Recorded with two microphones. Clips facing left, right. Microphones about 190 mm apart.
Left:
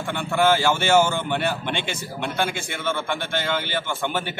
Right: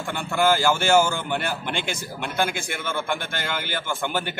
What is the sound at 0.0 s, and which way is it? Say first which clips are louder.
A man's voice: left 1 dB; 5° right (ahead or behind).